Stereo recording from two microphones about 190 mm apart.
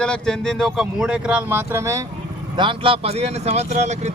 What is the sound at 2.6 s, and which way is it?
Speech, 25° right (ahead or behind).